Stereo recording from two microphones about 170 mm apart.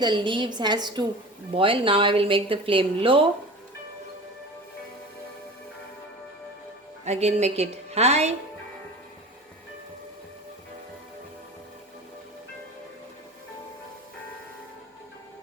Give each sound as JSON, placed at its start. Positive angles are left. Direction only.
{"t": 0.0, "sound": "a woman's voice", "side_deg": -25}
{"t": 7.0, "sound": "speech", "side_deg": -40}